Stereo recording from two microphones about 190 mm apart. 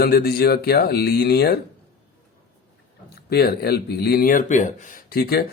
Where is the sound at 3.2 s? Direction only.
55° left (ahead or behind); by 4.7 s 40° left (ahead or behind).